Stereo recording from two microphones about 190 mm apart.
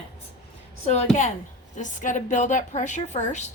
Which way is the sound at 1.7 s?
40° left (ahead or behind).